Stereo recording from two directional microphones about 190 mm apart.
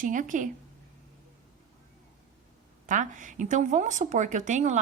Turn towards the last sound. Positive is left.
turn(degrees=-40)  # may be behind; listen again after turning